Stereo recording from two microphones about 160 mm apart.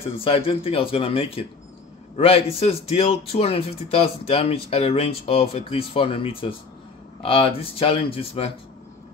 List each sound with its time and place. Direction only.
0.0 s speech: 35° left (ahead or behind)